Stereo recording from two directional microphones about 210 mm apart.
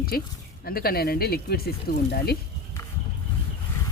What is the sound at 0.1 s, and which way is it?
Speech, 45° left (ahead or behind).